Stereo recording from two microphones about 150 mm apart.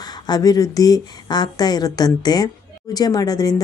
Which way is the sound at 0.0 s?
25° left (ahead or behind).